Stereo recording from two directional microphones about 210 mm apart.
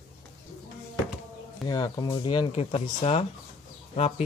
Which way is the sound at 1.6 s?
20° left (ahead or behind).